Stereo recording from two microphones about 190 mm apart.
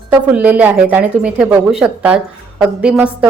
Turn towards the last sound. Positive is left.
turn(degrees=-5)  # may be behind; listen again after turning